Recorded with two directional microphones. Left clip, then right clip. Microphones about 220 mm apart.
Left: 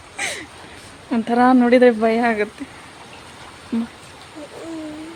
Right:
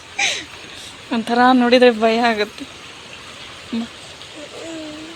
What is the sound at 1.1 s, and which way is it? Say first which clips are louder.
Speech: right 1 dB; 15° left (ahead or behind).